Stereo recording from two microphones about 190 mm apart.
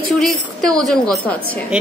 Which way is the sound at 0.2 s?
Centre (ahead or behind).